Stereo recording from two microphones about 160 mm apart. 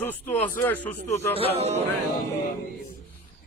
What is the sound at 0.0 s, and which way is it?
Speech, 10° left (ahead or behind).